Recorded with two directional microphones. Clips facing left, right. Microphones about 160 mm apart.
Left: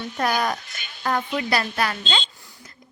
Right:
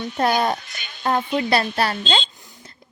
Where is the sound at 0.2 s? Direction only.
25° right (ahead or behind).